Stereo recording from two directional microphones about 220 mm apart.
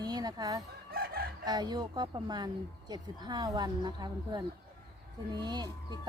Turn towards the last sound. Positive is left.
turn(degrees=-20)  # may be behind; listen again after turning